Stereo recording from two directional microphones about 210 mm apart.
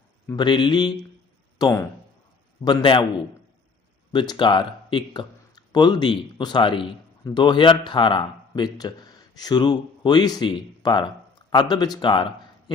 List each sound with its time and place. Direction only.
0.3 s a man's voice: 20° left (ahead or behind)
4.1 s a man's voice: 20° left (ahead or behind)